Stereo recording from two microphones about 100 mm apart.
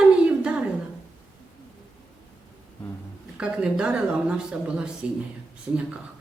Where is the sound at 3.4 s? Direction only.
10° right (ahead or behind).